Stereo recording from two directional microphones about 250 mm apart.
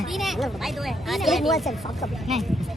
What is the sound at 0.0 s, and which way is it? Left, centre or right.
Speech, centre.